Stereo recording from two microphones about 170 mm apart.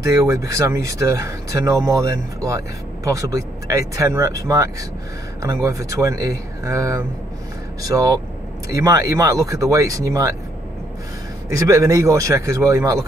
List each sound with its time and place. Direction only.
0.0 s speech: 20° right (ahead or behind)
11.4 s speech: 20° right (ahead or behind)